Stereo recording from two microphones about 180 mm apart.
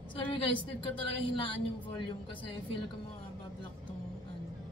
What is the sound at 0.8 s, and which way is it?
Speech, 25° left (ahead or behind).